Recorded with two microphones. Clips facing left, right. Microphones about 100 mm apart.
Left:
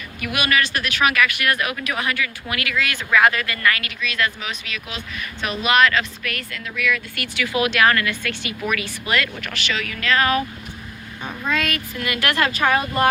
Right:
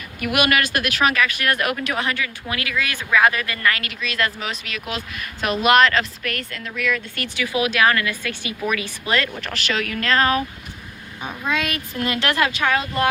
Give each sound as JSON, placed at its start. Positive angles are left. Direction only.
{"t": 0.2, "sound": "a woman's voice", "side_deg": -55}
{"t": 2.7, "sound": "a woman's voice", "side_deg": -15}
{"t": 7.3, "sound": "a woman's voice", "side_deg": -15}
{"t": 10.2, "sound": "a woman's voice", "side_deg": -25}
{"t": 11.2, "sound": "speech", "side_deg": -5}
{"t": 11.9, "sound": "a woman's voice", "side_deg": -30}
{"t": 12.5, "sound": "speech", "side_deg": 5}